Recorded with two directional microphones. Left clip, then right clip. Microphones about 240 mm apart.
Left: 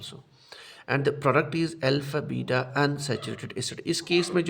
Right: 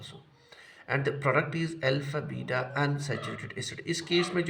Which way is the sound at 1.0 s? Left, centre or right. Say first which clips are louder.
Left 4 dB; left.